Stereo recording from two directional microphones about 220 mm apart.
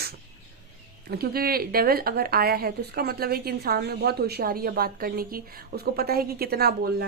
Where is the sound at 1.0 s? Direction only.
45° right (ahead or behind).